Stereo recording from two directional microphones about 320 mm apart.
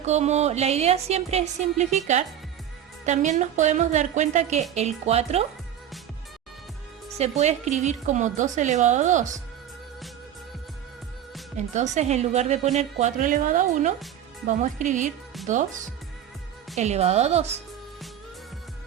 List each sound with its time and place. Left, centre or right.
0.0 s a woman's voice: right
7.2 s a woman's voice: right
11.5 s a woman's voice: right
16.7 s a woman's voice: right